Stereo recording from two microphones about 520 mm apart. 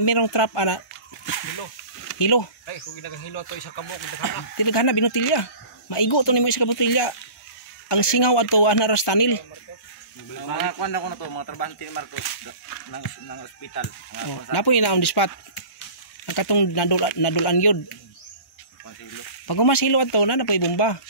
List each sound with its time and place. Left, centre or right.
0.0 s speech: left
2.1 s speech: left
10.5 s speech: left
16.3 s speech: left
19.4 s speech: left